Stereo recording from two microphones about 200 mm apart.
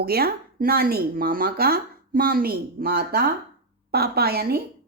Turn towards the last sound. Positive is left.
turn(degrees=-50)  # may be behind; listen again after turning